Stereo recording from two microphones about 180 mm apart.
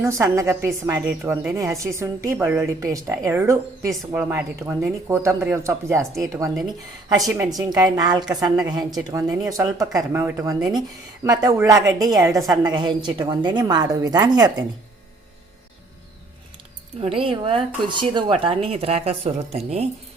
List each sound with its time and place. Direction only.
0.0 s a woman's voice: 15° right (ahead or behind)
7.3 s speech: 15° right (ahead or behind)
17.0 s speech: 30° right (ahead or behind)